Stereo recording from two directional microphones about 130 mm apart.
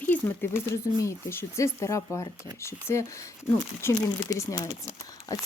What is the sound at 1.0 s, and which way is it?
Speech, 20° left (ahead or behind).